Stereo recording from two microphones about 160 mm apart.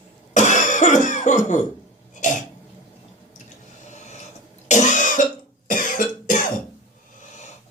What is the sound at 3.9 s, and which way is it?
Filing, 45° left (ahead or behind).